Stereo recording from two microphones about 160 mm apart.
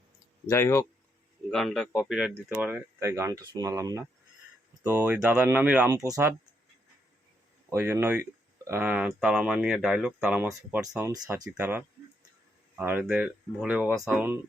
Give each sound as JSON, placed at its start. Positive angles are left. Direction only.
{"t": 0.4, "sound": "speech", "side_deg": 15}
{"t": 1.5, "sound": "a man's voice", "side_deg": 5}
{"t": 7.7, "sound": "speech", "side_deg": -15}
{"t": 12.8, "sound": "speech", "side_deg": -10}